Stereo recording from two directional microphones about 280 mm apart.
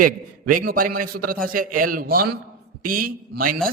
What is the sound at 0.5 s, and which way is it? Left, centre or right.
A man's voice, right.